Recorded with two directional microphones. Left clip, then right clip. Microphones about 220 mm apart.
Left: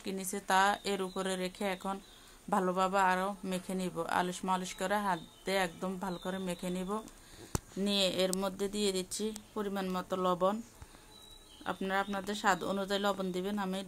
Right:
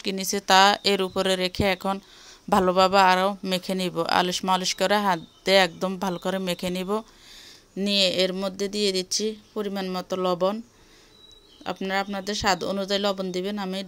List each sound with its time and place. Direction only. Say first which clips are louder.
0.0 s speech: right 12 dB; 35° right (ahead or behind)
7.8 s speech: right 9 dB; 30° right (ahead or behind)
11.6 s speech: right 7 dB; 25° right (ahead or behind)